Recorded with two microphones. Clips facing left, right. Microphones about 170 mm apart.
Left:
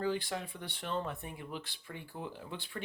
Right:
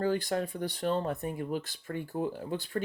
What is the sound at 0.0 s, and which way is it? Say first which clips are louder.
Speech: right 6 dB; 45° right (ahead or behind).